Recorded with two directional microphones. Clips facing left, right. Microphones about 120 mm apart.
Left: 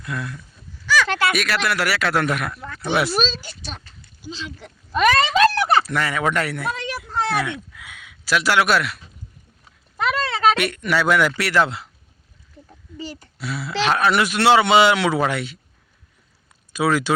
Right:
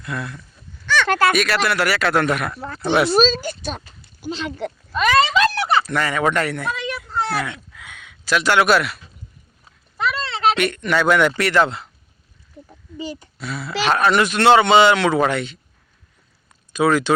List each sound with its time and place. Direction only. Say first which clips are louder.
0.0 s speech: right 1 dB; centre (ahead or behind)
1.0 s a sound: right 4 dB; 45° right (ahead or behind)
1.4 s speech: right 3 dB; centre (ahead or behind)
2.6 s speech: right 4 dB; 35° right (ahead or behind)
2.8 s speech: right 3 dB; 5° left (ahead or behind)
3.1 s a woman's voice: right 7 dB; 40° right (ahead or behind)
4.2 s speech: right 8 dB; 60° right (ahead or behind)
4.9 s a sound: even; 50° left (ahead or behind)
5.8 s speech: right 2 dB; 5° left (ahead or behind)
10.6 s speech: right 2 dB; 5° left (ahead or behind)
12.6 s a sound: right 4 dB; 15° right (ahead or behind)
13.4 s speech: even; 5° left (ahead or behind)
16.7 s speech: right 3 dB; 5° left (ahead or behind)